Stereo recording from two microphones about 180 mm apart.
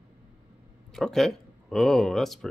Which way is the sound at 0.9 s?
Centre (ahead or behind).